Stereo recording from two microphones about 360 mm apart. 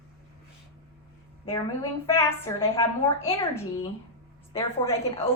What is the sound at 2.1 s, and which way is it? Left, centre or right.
A woman's voice, centre.